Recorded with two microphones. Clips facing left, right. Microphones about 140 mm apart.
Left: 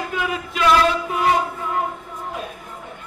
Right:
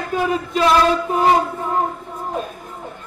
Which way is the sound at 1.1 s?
35° right (ahead or behind).